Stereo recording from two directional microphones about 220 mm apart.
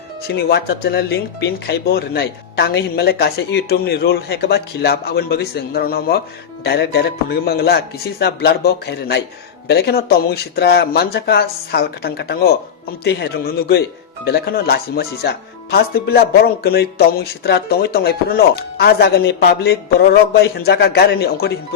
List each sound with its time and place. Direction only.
0.3 s speech: 50° left (ahead or behind)